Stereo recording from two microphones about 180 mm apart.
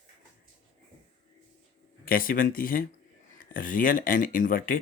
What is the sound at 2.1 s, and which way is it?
Speech, 55° left (ahead or behind).